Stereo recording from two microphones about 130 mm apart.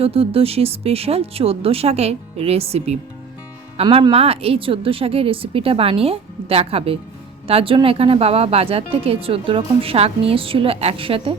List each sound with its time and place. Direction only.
0.0 s speech: 50° right (ahead or behind)
3.8 s speech: 35° right (ahead or behind)
4.1 s speech: 50° right (ahead or behind)